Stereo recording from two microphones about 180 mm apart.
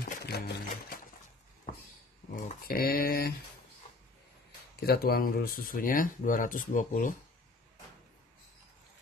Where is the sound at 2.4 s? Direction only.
55° left (ahead or behind).